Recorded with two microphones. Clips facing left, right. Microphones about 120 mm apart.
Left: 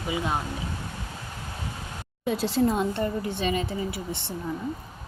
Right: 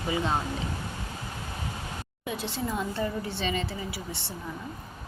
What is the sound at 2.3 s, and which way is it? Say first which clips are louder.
Speech: left 9 dB; 90° left.